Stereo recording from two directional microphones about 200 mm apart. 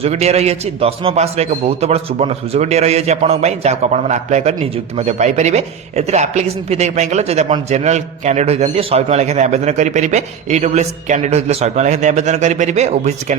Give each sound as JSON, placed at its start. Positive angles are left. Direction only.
{"t": 0.0, "sound": "a man's voice", "side_deg": -35}